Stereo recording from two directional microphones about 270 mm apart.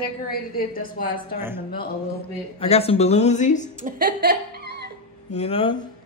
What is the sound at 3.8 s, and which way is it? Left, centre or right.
Speech, right.